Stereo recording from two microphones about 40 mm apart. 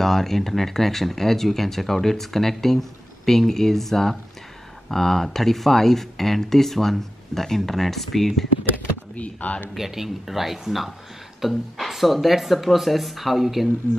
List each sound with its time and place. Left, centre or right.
0.0 s speech: centre
9.1 s speech: left
9.8 s speech: centre